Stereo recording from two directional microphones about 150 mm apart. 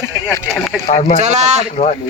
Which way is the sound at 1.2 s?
50° right (ahead or behind).